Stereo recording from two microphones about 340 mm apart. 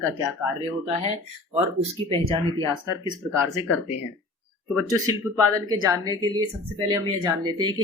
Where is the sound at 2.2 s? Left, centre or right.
Centre.